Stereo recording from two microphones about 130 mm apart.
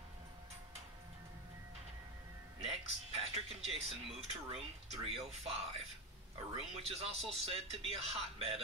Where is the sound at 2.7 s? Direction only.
50° right (ahead or behind).